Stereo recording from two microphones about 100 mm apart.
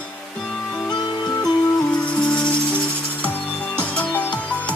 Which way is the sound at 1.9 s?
10° left (ahead or behind).